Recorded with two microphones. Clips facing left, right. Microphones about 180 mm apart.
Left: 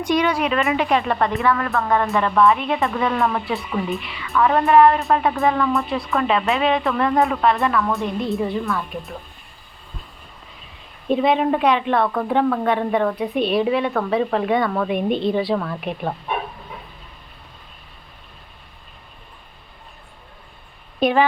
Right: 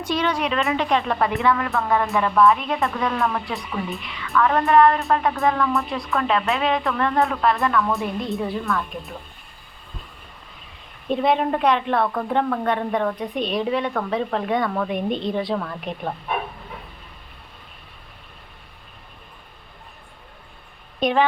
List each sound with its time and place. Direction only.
0.0 s a woman's voice: 15° left (ahead or behind)
1.3 s speech: 15° right (ahead or behind)
1.7 s a woman's voice: centre (ahead or behind)
4.3 s a woman's voice: 15° left (ahead or behind)
4.6 s a woman's voice: 5° left (ahead or behind)
7.3 s a woman's voice: centre (ahead or behind)
11.1 s a woman's voice: 5° left (ahead or behind)
21.0 s a woman's voice: 5° left (ahead or behind)